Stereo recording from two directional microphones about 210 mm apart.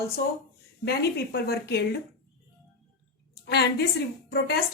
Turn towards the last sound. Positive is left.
turn(degrees=50)  # may be behind; listen again after turning